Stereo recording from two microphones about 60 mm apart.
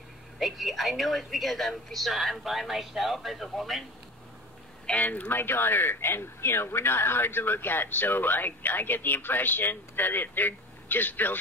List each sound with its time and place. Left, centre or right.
0.4 s speech: centre
4.8 s speech: left